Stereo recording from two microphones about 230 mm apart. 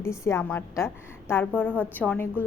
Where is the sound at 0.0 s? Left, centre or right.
Centre.